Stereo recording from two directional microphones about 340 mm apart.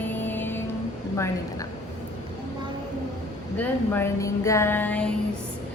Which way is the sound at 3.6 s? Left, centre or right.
Centre.